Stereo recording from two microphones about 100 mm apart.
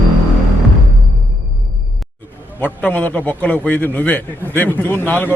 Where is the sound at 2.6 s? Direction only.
15° left (ahead or behind).